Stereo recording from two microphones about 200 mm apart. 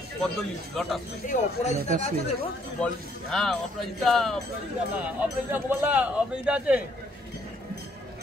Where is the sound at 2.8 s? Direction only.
Centre (ahead or behind).